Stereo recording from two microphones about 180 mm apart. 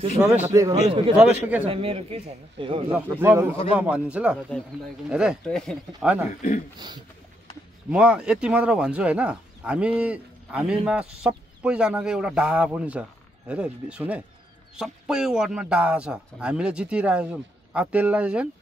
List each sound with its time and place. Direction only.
0.2 s speech: 10° right (ahead or behind)
0.8 s speech: 30° right (ahead or behind)
1.1 s speech: 10° right (ahead or behind)
1.7 s speech: 30° right (ahead or behind)
3.1 s speech: 15° right (ahead or behind)
7.9 s speech: 5° right (ahead or behind)